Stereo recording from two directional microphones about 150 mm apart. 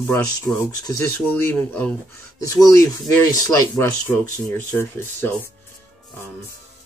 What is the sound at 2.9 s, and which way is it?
Speech, 25° left (ahead or behind).